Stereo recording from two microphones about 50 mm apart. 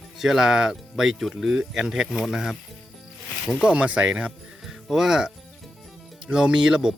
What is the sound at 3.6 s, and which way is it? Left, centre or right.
Speech, right.